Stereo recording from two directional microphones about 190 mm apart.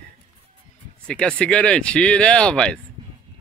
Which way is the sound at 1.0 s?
5° left (ahead or behind).